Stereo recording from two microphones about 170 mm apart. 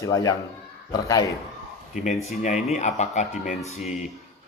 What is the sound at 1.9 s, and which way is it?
Speech, 45° left (ahead or behind).